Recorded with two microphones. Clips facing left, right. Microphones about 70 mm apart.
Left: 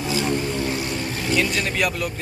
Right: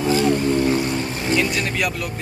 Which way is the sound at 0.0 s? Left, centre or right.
Right.